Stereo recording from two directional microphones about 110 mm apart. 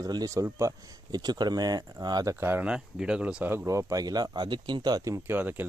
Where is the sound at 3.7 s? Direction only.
30° right (ahead or behind).